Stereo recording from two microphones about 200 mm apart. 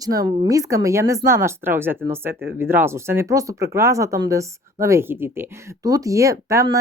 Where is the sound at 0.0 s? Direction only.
15° right (ahead or behind).